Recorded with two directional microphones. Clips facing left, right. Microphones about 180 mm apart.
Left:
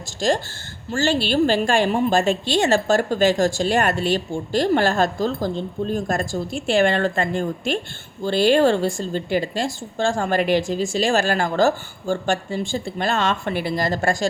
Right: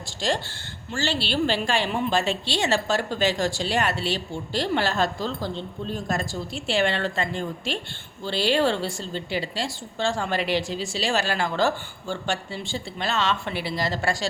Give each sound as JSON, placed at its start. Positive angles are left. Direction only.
{"t": 0.2, "sound": "a woman's voice", "side_deg": 45}